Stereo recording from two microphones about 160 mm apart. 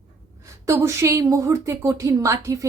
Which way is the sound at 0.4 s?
20° right (ahead or behind).